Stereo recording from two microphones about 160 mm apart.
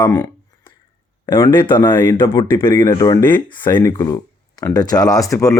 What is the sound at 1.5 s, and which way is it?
Speech, 30° left (ahead or behind).